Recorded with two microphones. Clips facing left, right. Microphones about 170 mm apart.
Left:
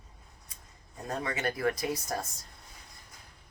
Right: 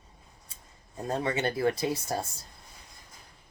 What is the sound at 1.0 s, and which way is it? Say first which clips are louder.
Speech: right 4 dB; 30° right (ahead or behind).